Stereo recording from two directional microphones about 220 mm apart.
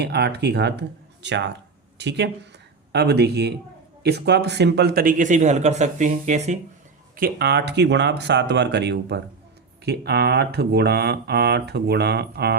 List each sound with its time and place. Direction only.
0.0 s a man's voice: 50° right (ahead or behind); by 6.6 s 30° right (ahead or behind)
7.2 s speech: 45° right (ahead or behind)